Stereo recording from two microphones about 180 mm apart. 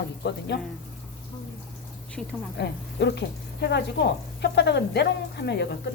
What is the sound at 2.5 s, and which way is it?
Speech, 70° left (ahead or behind).